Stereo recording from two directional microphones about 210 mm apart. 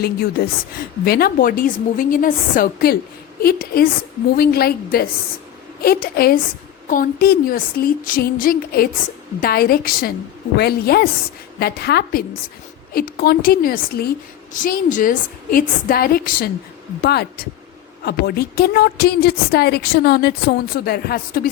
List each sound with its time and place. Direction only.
0.0 s a woman's voice: 45° left (ahead or behind)